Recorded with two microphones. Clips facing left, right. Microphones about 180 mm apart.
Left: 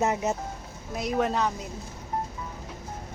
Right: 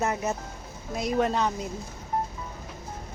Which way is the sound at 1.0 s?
Centre (ahead or behind).